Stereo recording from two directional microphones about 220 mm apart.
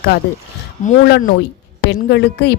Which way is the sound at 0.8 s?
35° left (ahead or behind).